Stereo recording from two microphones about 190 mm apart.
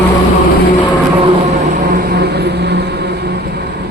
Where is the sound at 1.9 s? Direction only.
55° right (ahead or behind).